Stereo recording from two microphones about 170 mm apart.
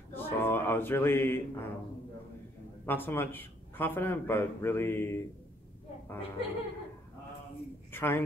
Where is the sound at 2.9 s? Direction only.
10° left (ahead or behind).